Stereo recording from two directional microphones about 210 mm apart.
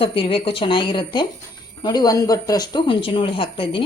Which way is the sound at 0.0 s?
25° left (ahead or behind).